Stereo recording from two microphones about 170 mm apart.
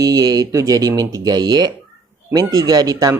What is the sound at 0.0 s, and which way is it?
Speech, 20° right (ahead or behind).